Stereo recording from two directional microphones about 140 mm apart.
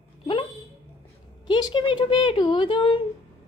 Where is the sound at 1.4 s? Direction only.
30° left (ahead or behind).